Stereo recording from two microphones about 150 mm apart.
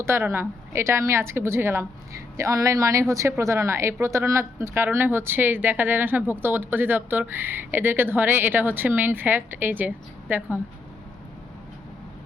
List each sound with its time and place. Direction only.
0.0 s speech: 15° right (ahead or behind)